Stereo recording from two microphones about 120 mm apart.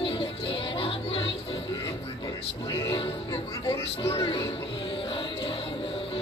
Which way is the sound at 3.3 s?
25° left (ahead or behind).